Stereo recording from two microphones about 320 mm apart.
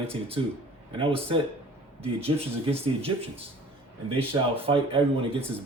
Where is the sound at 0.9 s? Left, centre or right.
Centre.